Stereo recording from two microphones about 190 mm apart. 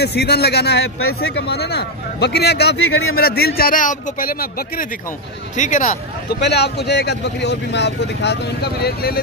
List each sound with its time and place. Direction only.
0.0 s a man's voice: 60° left (ahead or behind); by 5.9 s 40° left (ahead or behind)
6.4 s a man's voice: 60° left (ahead or behind)
8.8 s speech: 55° left (ahead or behind)